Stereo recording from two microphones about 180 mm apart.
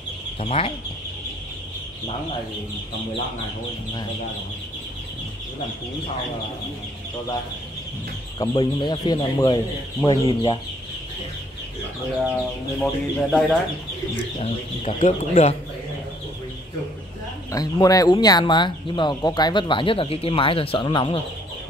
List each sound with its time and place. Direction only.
0.4 s speech: 30° left (ahead or behind)
8.4 s speech: 25° left (ahead or behind)
12.7 s speech: 5° left (ahead or behind)
15.0 s speech: 35° left (ahead or behind)
17.5 s speech: 20° left (ahead or behind)